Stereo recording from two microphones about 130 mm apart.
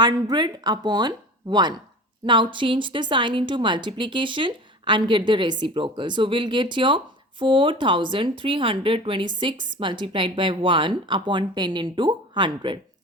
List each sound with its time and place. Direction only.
0.0 s a woman's voice: 30° right (ahead or behind)